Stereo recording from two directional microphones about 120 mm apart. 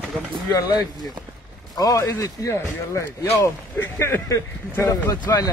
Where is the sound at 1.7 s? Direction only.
30° left (ahead or behind).